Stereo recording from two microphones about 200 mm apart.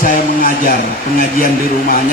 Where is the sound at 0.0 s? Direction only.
45° left (ahead or behind).